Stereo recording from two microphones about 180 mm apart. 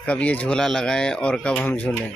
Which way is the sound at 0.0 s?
10° left (ahead or behind).